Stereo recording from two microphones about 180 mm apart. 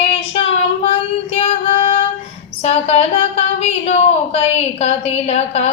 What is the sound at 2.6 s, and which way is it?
A woman's voice, 35° left (ahead or behind).